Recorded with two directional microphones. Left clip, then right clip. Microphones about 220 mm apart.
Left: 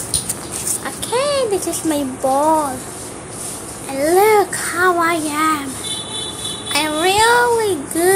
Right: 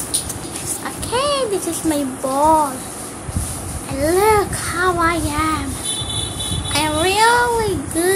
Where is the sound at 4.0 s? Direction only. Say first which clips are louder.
Left 2 dB; 10° left (ahead or behind).